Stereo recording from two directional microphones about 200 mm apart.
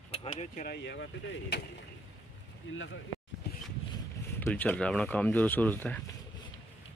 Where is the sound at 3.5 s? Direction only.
50° left (ahead or behind).